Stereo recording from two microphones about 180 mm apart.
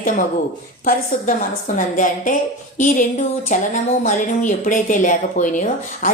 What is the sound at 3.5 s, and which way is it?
A woman's voice, 45° left (ahead or behind).